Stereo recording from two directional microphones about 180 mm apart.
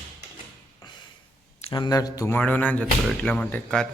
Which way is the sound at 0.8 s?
25° left (ahead or behind).